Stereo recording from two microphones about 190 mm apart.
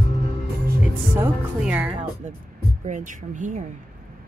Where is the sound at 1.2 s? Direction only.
5° right (ahead or behind).